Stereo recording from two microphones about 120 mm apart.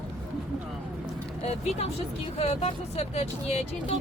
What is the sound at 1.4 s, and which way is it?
Speech, 60° left (ahead or behind).